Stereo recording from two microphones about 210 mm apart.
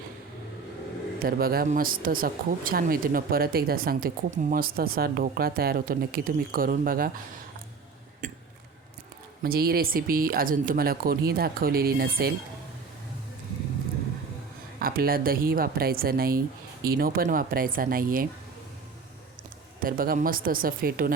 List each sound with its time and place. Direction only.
1.2 s speech: 45° right (ahead or behind)
8.2 s a sound: 35° right (ahead or behind)
9.4 s speech: 45° right (ahead or behind)
14.8 s speech: 45° right (ahead or behind)
19.8 s speech: 40° right (ahead or behind)